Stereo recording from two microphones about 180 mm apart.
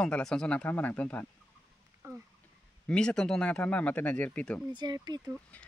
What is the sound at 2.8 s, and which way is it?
Speech, 5° left (ahead or behind).